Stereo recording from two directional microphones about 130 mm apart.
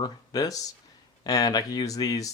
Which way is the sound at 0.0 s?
30° left (ahead or behind).